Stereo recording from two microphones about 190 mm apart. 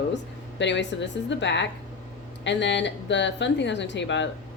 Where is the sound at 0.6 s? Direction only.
70° left (ahead or behind).